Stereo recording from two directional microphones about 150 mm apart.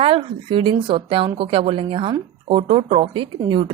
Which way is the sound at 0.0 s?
35° right (ahead or behind).